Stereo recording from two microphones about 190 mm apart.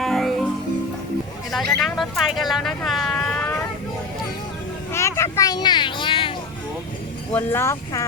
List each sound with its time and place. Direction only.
0.0 s music: centre (ahead or behind)
1.5 s speech: centre (ahead or behind)
4.9 s a sound: 15° left (ahead or behind)
7.3 s speech: 15° left (ahead or behind)